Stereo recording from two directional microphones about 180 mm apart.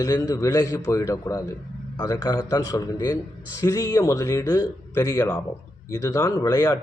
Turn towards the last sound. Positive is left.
turn(degrees=20)  # may be behind; listen again after turning